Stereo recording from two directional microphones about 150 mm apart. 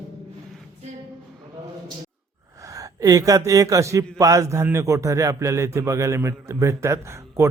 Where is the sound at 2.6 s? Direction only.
20° right (ahead or behind).